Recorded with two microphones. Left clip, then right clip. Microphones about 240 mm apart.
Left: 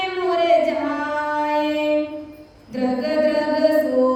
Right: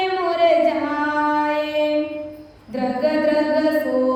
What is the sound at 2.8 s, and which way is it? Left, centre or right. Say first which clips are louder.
Chant: even; centre.